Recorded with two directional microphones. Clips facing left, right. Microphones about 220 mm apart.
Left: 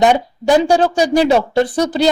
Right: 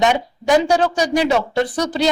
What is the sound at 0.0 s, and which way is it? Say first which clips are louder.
Speech: left 4 dB; 30° left (ahead or behind).